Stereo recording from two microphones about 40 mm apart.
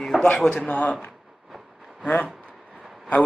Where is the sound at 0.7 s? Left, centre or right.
Left.